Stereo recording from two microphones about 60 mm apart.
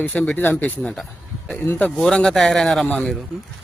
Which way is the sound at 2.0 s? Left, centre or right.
Centre.